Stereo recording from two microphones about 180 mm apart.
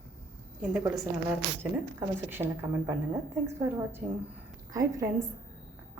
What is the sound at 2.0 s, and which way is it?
A woman's voice, 10° right (ahead or behind).